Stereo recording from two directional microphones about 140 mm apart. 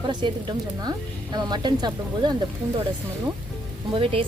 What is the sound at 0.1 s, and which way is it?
Speech, 35° right (ahead or behind).